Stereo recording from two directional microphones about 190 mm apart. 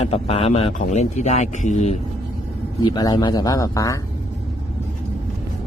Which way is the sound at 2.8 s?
20° left (ahead or behind).